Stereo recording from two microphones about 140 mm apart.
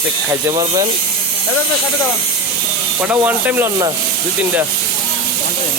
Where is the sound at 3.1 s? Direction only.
10° right (ahead or behind).